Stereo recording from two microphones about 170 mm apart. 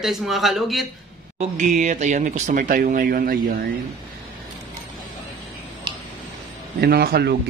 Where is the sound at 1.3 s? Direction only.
45° right (ahead or behind).